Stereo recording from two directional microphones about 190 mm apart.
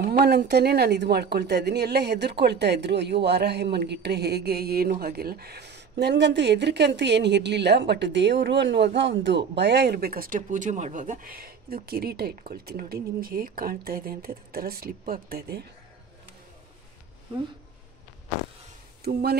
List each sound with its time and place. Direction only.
0.2 s a woman's voice: 60° right (ahead or behind)